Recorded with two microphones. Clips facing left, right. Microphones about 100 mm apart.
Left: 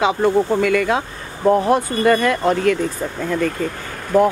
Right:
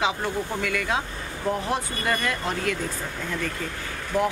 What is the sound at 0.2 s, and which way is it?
Speech, 60° left (ahead or behind).